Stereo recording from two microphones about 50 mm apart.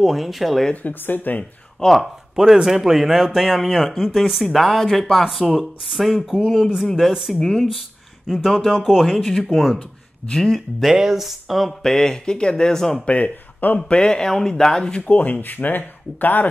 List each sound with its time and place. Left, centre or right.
0.0 s speech: centre
0.8 s speech: left
1.9 s speech: centre
7.3 s speech: centre
8.3 s speech: centre
9.8 s speech: centre
10.8 s speech: centre
11.8 s speech: centre
13.0 s speech: left
13.7 s speech: centre; by 16.4 s left